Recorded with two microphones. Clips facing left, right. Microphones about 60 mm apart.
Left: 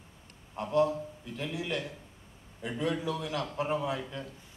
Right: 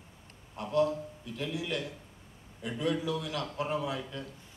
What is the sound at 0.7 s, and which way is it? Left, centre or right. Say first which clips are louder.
A man's voice: left 1 dB; centre.